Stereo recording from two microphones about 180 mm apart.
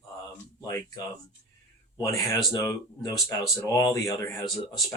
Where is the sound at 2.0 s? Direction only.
20° left (ahead or behind).